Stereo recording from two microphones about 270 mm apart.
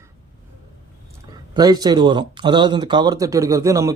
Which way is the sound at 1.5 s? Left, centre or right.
Centre.